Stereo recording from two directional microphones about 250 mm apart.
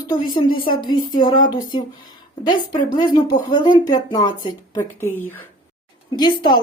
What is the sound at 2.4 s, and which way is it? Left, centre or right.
Speech, centre.